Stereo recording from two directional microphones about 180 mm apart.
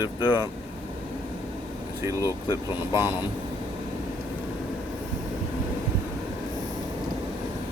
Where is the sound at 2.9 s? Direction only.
15° right (ahead or behind).